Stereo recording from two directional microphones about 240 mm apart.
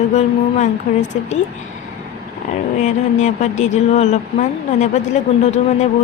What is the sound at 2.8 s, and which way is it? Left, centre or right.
Speech, left.